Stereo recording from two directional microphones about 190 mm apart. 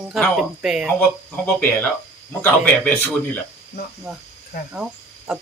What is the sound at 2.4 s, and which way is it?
Speech, 10° left (ahead or behind).